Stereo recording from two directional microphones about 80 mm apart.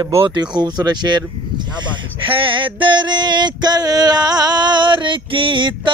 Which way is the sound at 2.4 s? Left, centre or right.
Right.